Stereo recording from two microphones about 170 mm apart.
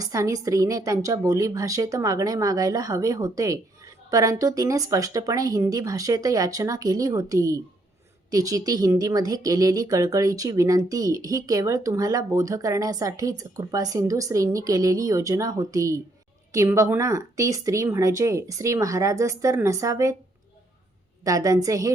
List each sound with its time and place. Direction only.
0.0 s speech: 20° right (ahead or behind)
21.2 s speech: 20° right (ahead or behind)